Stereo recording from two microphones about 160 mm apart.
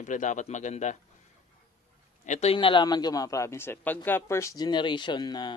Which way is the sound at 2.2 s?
45° left (ahead or behind).